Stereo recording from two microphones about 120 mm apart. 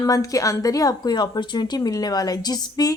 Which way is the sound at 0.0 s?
30° left (ahead or behind).